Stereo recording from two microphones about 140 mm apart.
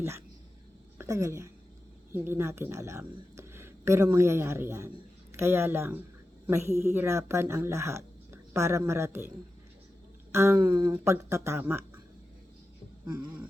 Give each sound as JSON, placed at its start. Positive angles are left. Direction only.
{"t": 0.9, "sound": "a woman's voice", "side_deg": -20}
{"t": 10.3, "sound": "speech", "side_deg": -20}
{"t": 10.7, "sound": "speech", "side_deg": -30}
{"t": 10.9, "sound": "speech", "side_deg": -20}